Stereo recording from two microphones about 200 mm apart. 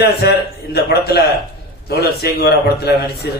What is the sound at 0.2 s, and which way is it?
A man's voice, 55° left (ahead or behind).